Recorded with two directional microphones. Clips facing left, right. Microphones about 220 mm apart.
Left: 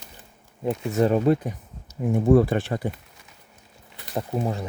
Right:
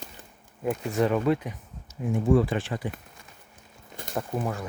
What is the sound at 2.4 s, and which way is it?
Speech, 60° left (ahead or behind).